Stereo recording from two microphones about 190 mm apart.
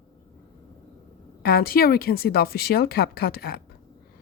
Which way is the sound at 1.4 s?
55° left (ahead or behind).